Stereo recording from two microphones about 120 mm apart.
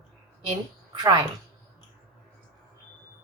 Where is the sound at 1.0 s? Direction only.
35° right (ahead or behind).